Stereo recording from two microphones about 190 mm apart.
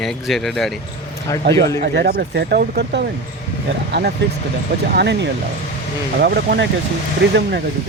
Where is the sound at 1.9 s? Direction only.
60° right (ahead or behind).